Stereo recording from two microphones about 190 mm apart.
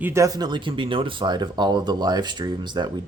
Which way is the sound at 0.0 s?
15° right (ahead or behind).